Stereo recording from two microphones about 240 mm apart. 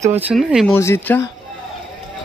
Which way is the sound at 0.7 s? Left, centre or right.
Centre.